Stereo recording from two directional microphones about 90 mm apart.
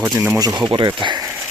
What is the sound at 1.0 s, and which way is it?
Speech, 60° right (ahead or behind).